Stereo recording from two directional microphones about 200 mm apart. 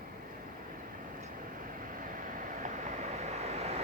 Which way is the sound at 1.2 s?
45° right (ahead or behind).